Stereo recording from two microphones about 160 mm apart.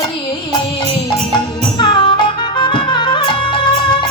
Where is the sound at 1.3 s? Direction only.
30° left (ahead or behind).